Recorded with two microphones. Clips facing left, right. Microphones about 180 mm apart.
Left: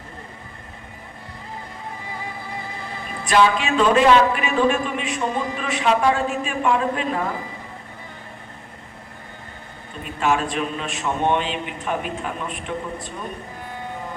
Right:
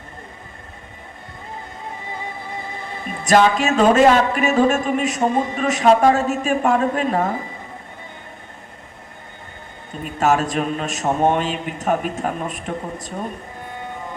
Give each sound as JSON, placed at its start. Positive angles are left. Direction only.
{"t": 3.2, "sound": "speech", "side_deg": -45}
{"t": 10.0, "sound": "speech", "side_deg": -40}